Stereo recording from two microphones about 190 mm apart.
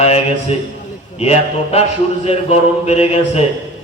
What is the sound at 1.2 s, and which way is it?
Speech, 30° left (ahead or behind).